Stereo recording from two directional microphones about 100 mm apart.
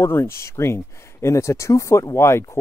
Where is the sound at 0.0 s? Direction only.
25° left (ahead or behind).